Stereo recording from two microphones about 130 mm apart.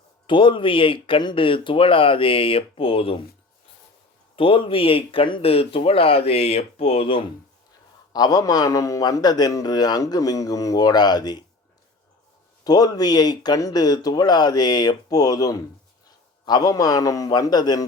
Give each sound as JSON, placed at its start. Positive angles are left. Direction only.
{"t": 0.3, "sound": "speech", "side_deg": 40}
{"t": 4.4, "sound": "speech", "side_deg": 45}
{"t": 8.1, "sound": "a man's voice", "side_deg": 30}
{"t": 12.6, "sound": "a man's voice", "side_deg": 30}